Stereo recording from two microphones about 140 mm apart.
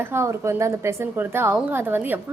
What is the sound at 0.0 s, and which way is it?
A woman's voice, 20° right (ahead or behind).